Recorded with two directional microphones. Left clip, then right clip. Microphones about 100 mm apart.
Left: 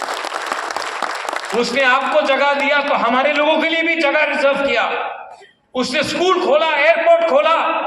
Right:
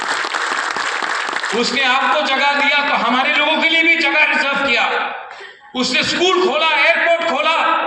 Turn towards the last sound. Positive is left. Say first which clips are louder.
# left 3 dB
turn(degrees=35)  # may be behind; listen again after turning